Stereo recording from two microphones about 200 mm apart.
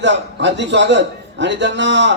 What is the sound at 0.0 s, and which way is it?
Speech, 60° right (ahead or behind).